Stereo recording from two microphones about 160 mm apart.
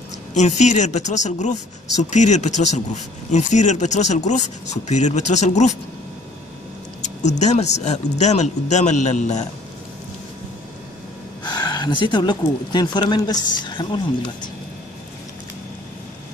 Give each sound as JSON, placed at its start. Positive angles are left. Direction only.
{"t": 0.3, "sound": "speech", "side_deg": 45}
{"t": 7.0, "sound": "speech", "side_deg": 45}
{"t": 11.4, "sound": "speech", "side_deg": 25}